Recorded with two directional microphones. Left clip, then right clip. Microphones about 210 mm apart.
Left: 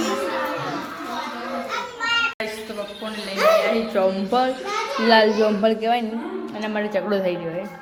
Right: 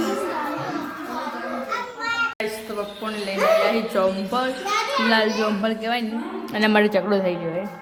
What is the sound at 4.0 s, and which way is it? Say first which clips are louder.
Speech: left 1 dB; 5° right (ahead or behind).